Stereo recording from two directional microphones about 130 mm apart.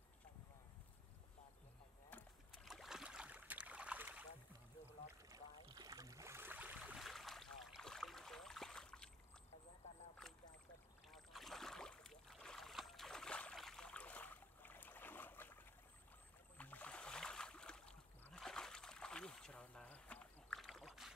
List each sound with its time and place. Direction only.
2.5 s boat: centre (ahead or behind)
5.3 s boat: 30° right (ahead or behind); by 7.0 s 10° right (ahead or behind)
7.0 s boat: centre (ahead or behind)
10.3 s boat: 5° left (ahead or behind)